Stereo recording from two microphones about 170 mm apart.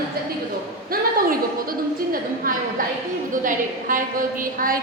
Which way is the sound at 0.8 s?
60° right (ahead or behind).